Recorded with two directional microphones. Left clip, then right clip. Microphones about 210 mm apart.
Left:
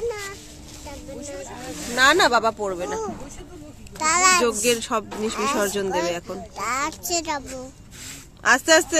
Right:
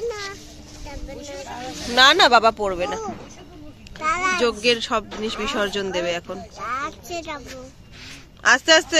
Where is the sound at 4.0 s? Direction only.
60° left (ahead or behind).